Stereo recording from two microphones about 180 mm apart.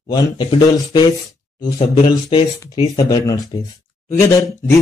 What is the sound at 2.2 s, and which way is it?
Speech, 25° left (ahead or behind).